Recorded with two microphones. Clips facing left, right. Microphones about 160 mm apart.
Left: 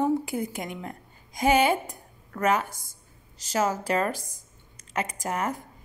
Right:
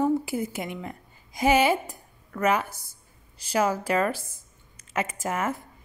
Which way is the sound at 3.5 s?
10° right (ahead or behind).